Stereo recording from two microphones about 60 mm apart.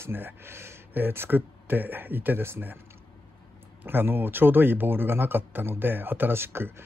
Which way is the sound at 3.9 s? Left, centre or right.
Right.